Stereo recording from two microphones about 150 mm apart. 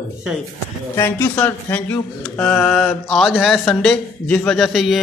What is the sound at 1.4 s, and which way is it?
Speech, 10° left (ahead or behind).